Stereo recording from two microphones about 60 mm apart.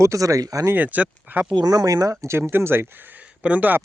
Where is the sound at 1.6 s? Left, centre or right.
Right.